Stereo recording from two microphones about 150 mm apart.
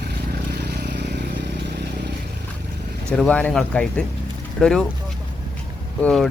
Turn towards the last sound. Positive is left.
turn(degrees=5)  # may be behind; listen again after turning